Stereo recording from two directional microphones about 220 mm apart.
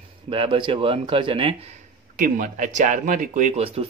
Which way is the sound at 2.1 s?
40° right (ahead or behind).